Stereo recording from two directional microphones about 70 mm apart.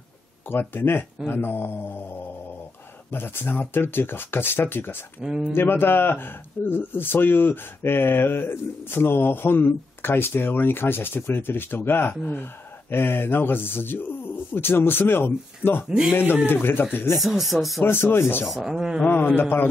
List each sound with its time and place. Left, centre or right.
0.5 s speech: left
3.1 s speech: left
5.2 s speech: centre
5.5 s speech: left
17.2 s speech: centre
17.8 s speech: left
18.4 s speech: centre
19.0 s a man's voice: left